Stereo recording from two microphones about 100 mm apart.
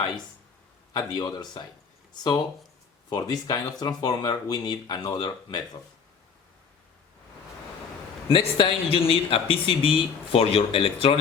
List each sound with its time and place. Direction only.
0.9 s speech: 40° left (ahead or behind)
3.1 s speech: 40° left (ahead or behind)
8.3 s speech: 60° left (ahead or behind)